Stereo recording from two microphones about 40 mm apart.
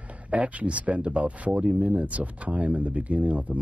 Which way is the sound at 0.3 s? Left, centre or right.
Right.